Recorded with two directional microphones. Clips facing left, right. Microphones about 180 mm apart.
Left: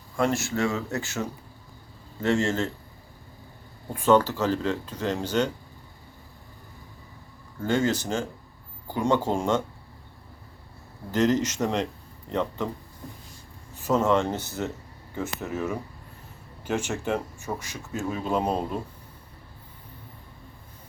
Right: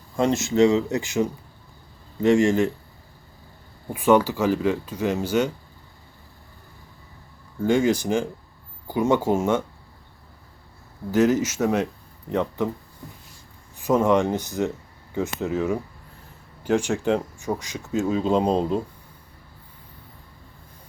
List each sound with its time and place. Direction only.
0.2 s speech: 20° right (ahead or behind)
3.8 s speech: 10° right (ahead or behind)
7.6 s speech: 10° right (ahead or behind)
11.1 s speech: 10° right (ahead or behind)
13.7 s speech: 15° right (ahead or behind)